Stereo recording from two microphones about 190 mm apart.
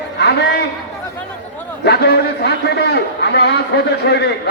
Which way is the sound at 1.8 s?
60° left (ahead or behind).